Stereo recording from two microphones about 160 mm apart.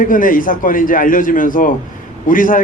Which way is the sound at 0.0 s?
60° left (ahead or behind).